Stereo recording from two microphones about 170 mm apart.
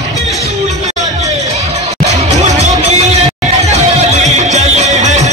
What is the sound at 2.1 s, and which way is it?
Music, 40° right (ahead or behind).